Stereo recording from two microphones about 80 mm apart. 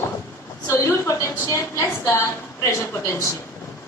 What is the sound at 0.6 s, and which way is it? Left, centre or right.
A woman's voice, left.